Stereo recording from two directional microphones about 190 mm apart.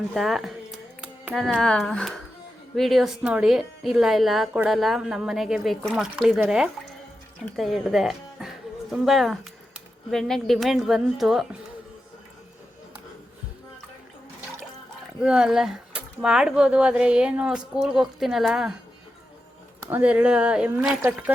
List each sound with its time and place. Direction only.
0.1 s speech: centre (ahead or behind)
15.2 s speech: 5° right (ahead or behind)
19.9 s speech: 5° right (ahead or behind)